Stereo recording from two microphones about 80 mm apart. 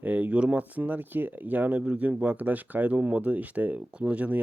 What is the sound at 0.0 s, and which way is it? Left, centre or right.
Speech, centre.